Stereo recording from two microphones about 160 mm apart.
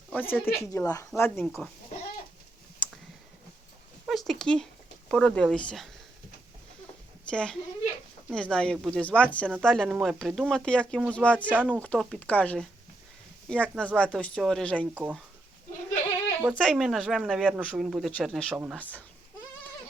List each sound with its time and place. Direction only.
0.1 s speech: 10° left (ahead or behind)
4.0 s speech: centre (ahead or behind)
7.3 s speech: 5° left (ahead or behind)
14.9 s speech: 10° right (ahead or behind)
16.5 s speech: centre (ahead or behind)
18.5 s speech: 5° right (ahead or behind)
18.8 s speech: 10° left (ahead or behind)